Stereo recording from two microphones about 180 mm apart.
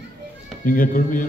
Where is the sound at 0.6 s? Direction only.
50° left (ahead or behind).